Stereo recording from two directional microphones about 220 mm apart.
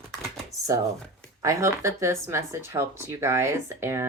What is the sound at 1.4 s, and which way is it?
Speech, 15° right (ahead or behind).